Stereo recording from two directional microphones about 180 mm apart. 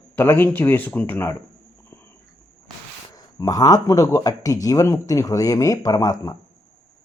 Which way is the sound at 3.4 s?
20° left (ahead or behind).